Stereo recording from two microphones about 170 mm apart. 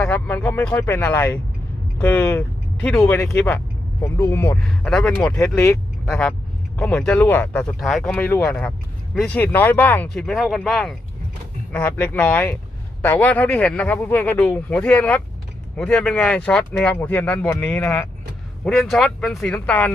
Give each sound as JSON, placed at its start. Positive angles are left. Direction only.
{"t": 0.0, "sound": "speech", "side_deg": 10}
{"t": 4.9, "sound": "speech", "side_deg": 5}
{"t": 5.4, "sound": "speech", "side_deg": 15}
{"t": 6.1, "sound": "speech", "side_deg": 5}